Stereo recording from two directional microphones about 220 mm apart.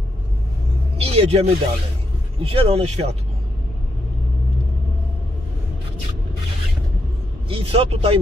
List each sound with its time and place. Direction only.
0.9 s speech: 25° right (ahead or behind)
7.4 s speech: 25° right (ahead or behind)